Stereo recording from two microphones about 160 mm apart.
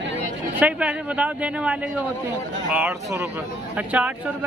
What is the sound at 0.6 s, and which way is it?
A man's voice, 10° right (ahead or behind).